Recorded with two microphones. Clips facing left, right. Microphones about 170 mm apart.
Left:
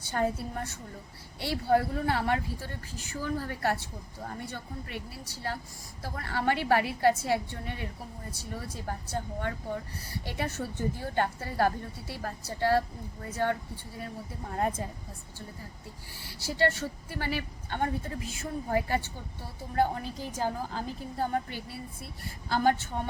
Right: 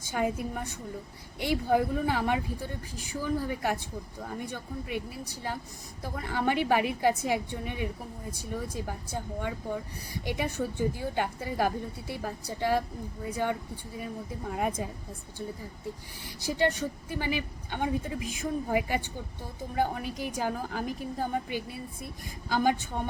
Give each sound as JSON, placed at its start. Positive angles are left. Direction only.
{"t": 0.0, "sound": "a woman's voice", "side_deg": -15}
{"t": 16.2, "sound": "a woman's voice", "side_deg": -15}